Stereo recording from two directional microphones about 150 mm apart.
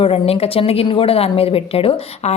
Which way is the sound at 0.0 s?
40° left (ahead or behind).